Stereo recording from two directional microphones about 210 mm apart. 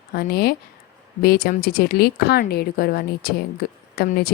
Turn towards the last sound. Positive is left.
turn(degrees=45)  # may be behind; listen again after turning